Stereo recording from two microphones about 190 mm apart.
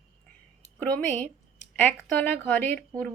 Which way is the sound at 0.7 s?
10° left (ahead or behind).